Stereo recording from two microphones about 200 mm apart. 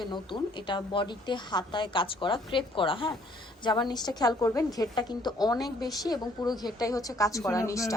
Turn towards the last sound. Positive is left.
turn(degrees=15)  # may be behind; listen again after turning